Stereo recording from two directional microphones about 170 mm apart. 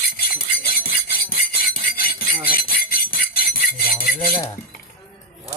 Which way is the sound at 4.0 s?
60° left (ahead or behind).